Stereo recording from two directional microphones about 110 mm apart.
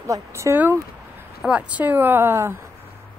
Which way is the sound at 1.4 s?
10° right (ahead or behind).